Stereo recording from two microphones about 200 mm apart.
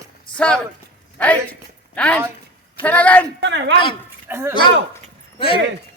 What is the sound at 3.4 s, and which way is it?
Speech, 65° right (ahead or behind).